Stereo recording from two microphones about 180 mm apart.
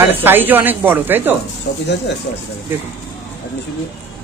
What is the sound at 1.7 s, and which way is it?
Speech, 70° left (ahead or behind).